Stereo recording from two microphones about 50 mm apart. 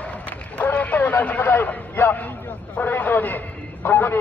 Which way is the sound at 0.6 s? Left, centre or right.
Left.